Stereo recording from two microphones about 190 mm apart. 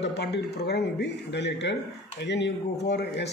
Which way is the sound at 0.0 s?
65° left (ahead or behind).